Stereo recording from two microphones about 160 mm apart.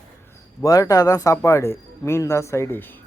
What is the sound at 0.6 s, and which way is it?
Speech, 20° left (ahead or behind).